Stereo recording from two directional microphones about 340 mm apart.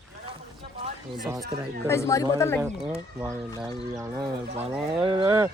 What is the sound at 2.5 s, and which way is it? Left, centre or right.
Speech, centre.